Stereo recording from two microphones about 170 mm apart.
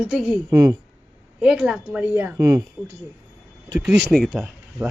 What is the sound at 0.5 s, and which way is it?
Speech, 20° right (ahead or behind).